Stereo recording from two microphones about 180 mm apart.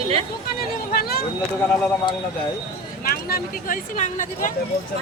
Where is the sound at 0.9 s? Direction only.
55° left (ahead or behind).